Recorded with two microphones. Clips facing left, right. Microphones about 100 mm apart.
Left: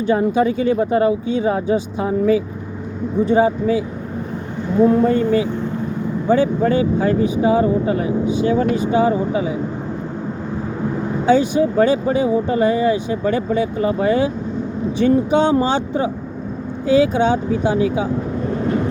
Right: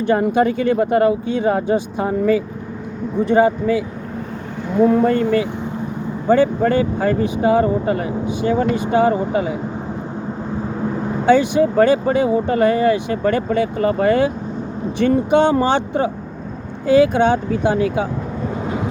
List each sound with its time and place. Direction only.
0.0 s speech: 60° right (ahead or behind)
5.0 s speech: 65° right (ahead or behind)
11.3 s speech: 60° right (ahead or behind)
18.6 s vehicle: 10° right (ahead or behind)